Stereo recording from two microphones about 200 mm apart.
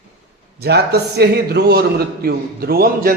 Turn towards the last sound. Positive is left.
turn(degrees=-50)  # may be behind; listen again after turning